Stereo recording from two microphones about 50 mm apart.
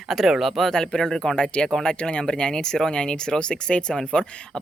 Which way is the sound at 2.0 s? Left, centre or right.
Centre.